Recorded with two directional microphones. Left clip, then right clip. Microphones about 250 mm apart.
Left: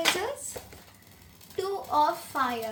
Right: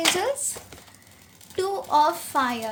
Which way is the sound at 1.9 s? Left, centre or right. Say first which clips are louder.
Right 5 dB; right.